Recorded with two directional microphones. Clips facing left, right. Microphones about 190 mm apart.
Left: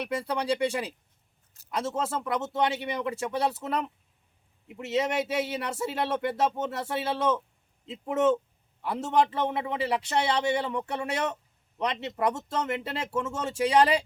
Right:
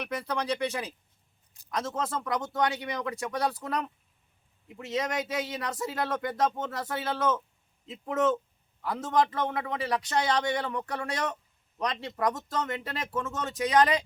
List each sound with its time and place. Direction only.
0.0 s a man's voice: 30° left (ahead or behind)
1.7 s a man's voice: 25° left (ahead or behind)
4.8 s a man's voice: 25° left (ahead or behind)